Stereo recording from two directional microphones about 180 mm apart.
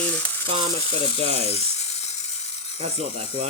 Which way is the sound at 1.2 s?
35° right (ahead or behind).